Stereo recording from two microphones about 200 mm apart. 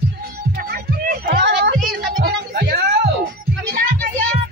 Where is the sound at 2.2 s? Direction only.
50° right (ahead or behind).